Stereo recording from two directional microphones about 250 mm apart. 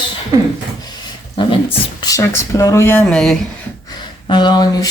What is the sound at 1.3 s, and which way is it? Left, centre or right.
Speech, centre.